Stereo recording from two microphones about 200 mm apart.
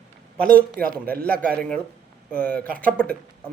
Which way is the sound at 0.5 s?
45° right (ahead or behind).